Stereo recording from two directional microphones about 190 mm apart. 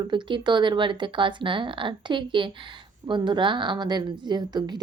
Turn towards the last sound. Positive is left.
turn(degrees=-20)  # may be behind; listen again after turning